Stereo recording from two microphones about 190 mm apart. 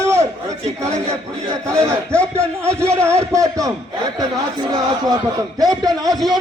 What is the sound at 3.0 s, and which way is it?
Speech, 15° right (ahead or behind).